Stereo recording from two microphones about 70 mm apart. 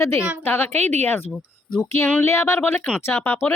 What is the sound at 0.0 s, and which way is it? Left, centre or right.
A woman's voice, left.